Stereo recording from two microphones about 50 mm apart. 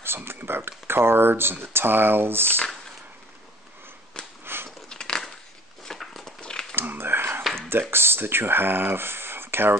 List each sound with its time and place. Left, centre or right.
0.0 s speech: right
4.2 s sniff: centre
4.6 s crunch: centre
5.9 s dog: centre
6.7 s a sound: right
7.9 s speech: right